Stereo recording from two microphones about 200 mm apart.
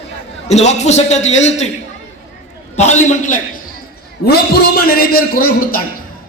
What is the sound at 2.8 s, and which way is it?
Speech, 35° left (ahead or behind).